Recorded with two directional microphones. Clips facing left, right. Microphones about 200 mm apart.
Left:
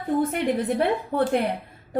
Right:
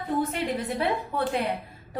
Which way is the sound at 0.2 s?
55° left (ahead or behind).